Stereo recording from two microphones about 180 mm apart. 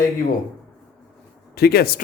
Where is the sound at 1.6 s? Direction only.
60° left (ahead or behind).